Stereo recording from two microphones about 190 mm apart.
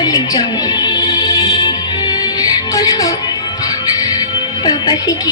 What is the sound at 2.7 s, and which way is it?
Speech, 20° left (ahead or behind).